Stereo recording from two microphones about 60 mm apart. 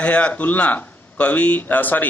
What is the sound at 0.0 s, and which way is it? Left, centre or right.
A man's voice, left.